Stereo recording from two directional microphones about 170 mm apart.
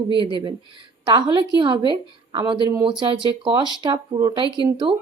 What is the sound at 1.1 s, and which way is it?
Speech, 25° right (ahead or behind).